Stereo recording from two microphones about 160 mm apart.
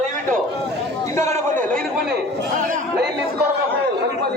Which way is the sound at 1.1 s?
15° left (ahead or behind).